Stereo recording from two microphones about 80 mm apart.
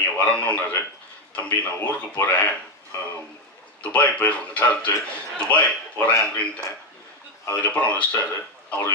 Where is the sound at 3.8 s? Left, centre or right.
Centre.